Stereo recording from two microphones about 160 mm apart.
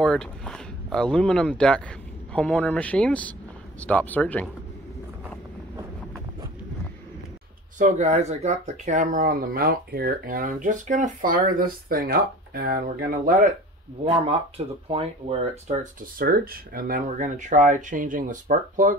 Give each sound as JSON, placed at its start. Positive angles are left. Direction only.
{"t": 0.0, "sound": "speech", "side_deg": 5}
{"t": 7.8, "sound": "speech", "side_deg": -45}
{"t": 14.6, "sound": "speech", "side_deg": -40}
{"t": 15.8, "sound": "speech", "side_deg": -65}